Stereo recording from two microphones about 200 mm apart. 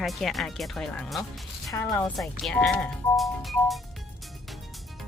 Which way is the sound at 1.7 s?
20° left (ahead or behind).